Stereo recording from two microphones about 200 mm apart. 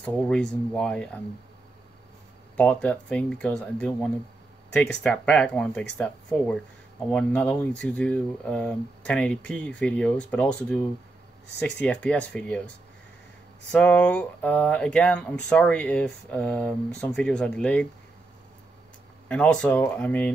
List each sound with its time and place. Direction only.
0.0 s speech: 5° left (ahead or behind)
2.5 s speech: 5° left (ahead or behind)
19.2 s speech: 5° left (ahead or behind)